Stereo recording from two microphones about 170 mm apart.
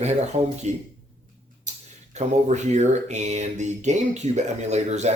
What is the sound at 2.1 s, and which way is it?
Speech, 40° right (ahead or behind).